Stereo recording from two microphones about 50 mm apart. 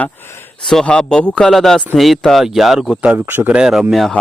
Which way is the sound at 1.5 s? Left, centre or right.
Centre.